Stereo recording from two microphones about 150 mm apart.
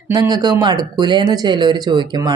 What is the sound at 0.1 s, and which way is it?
Speech, 25° right (ahead or behind).